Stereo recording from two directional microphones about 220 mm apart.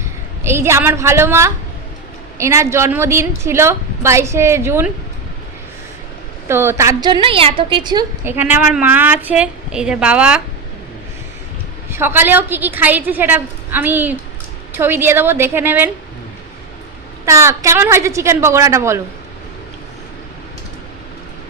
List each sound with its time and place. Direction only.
0.4 s a woman's voice: 10° right (ahead or behind)
6.5 s a woman's voice: 10° right (ahead or behind)
11.9 s a woman's voice: 10° right (ahead or behind)
17.2 s a woman's voice: 15° right (ahead or behind)